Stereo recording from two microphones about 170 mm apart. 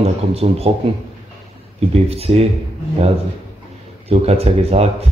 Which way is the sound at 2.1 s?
35° right (ahead or behind).